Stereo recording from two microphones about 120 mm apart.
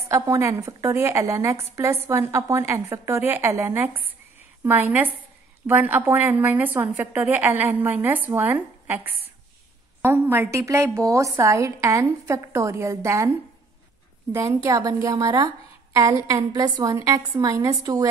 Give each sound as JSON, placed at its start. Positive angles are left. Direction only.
{"t": 0.1, "sound": "a woman's voice", "side_deg": -25}
{"t": 14.3, "sound": "a woman's voice", "side_deg": -25}